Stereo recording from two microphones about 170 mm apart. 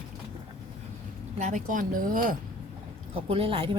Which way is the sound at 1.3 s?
45° right (ahead or behind).